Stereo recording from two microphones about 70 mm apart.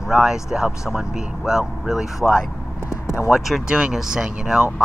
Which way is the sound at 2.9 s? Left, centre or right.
Left.